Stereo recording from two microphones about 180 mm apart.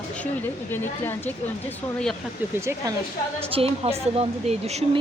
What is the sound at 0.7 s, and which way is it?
Speech, 10° left (ahead or behind).